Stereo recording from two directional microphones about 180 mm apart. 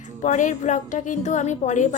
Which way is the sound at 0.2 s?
45° left (ahead or behind).